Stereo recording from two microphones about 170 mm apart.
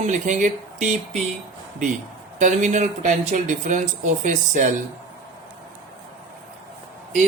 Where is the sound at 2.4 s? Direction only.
45° right (ahead or behind).